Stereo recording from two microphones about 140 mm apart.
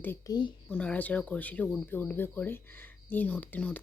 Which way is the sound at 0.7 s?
10° left (ahead or behind).